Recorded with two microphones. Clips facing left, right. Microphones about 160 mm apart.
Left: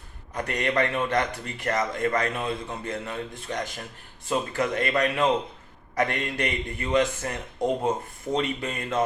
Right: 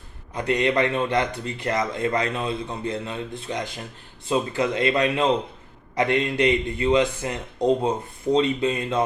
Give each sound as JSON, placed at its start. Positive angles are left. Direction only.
{"t": 0.3, "sound": "speech", "side_deg": -20}